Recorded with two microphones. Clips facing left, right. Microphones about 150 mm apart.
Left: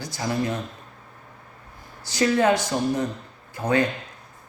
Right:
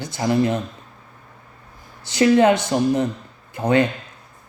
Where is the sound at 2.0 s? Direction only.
20° right (ahead or behind).